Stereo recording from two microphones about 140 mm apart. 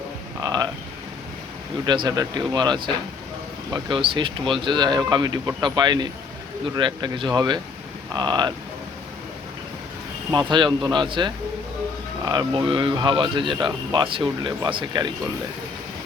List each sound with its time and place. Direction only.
0.3 s a sound: 30° right (ahead or behind)
1.9 s speech: 30° right (ahead or behind)
10.3 s speech: 35° right (ahead or behind)